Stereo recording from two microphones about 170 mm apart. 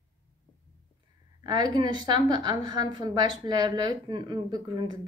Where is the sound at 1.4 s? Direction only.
25° right (ahead or behind).